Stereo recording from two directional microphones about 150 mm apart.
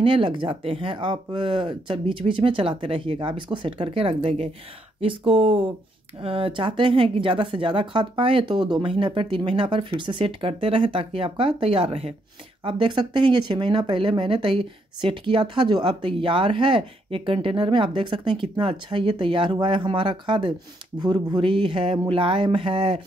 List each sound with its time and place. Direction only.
0.0 s speech: 35° right (ahead or behind)